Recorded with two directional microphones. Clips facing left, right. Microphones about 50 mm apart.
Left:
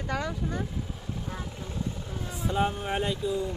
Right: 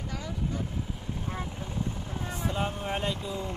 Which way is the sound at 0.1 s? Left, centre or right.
Left.